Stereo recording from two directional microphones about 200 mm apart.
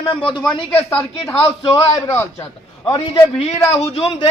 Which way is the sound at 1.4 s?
25° left (ahead or behind).